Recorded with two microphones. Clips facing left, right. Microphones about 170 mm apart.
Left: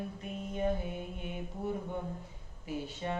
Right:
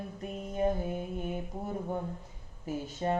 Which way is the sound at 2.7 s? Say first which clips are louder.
Right 5 dB; 45° right (ahead or behind).